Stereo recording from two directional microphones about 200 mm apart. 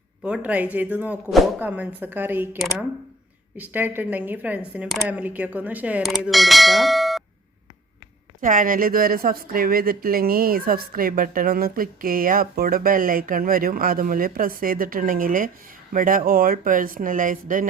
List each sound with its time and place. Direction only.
0.2 s a woman's voice: 5° right (ahead or behind)
8.4 s speech: 40° right (ahead or behind)